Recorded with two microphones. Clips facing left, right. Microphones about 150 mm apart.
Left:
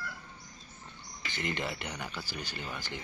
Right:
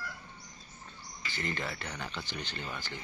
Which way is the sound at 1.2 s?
20° left (ahead or behind).